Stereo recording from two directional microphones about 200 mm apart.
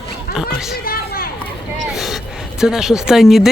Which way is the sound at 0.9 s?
50° left (ahead or behind).